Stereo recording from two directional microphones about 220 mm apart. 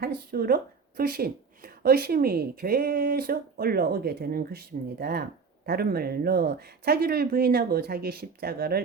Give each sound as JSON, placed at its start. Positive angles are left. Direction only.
{"t": 0.0, "sound": "speech", "side_deg": -45}